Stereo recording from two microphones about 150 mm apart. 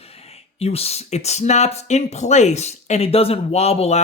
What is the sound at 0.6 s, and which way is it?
Speech, 40° left (ahead or behind).